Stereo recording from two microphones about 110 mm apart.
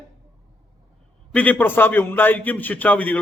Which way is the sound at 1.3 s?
10° left (ahead or behind).